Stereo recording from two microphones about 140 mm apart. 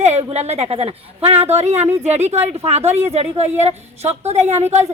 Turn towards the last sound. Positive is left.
turn(degrees=-50)  # may be behind; listen again after turning